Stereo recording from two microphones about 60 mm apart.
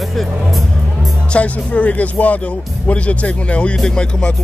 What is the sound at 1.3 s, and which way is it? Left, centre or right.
A man's voice, left.